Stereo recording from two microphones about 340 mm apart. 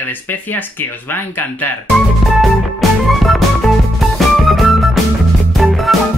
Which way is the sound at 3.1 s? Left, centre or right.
Centre.